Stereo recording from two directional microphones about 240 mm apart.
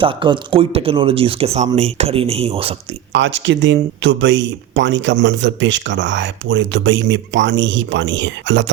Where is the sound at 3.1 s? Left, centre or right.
Right.